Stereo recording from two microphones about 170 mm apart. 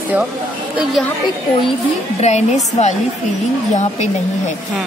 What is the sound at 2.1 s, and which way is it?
Speech, 40° left (ahead or behind).